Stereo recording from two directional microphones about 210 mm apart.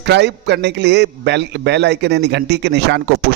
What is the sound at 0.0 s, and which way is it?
A man's voice, 55° right (ahead or behind).